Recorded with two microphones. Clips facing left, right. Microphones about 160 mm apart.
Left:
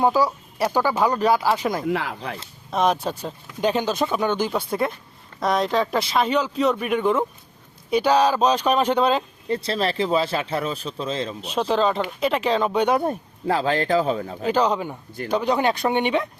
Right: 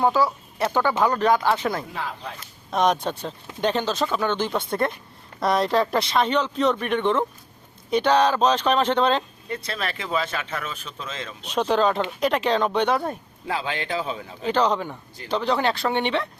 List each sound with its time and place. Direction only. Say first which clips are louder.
0.0 s speech: left 1 dB; 15° left (ahead or behind)
1.9 s speech: left 7 dB; 90° left
2.6 s speech: even; 5° left (ahead or behind)
9.5 s speech: left 7 dB; 30° left (ahead or behind)
11.4 s speech: right 1 dB; centre (ahead or behind)
13.5 s speech: left 7 dB; 40° left (ahead or behind)
14.5 s speech: even; 10° left (ahead or behind)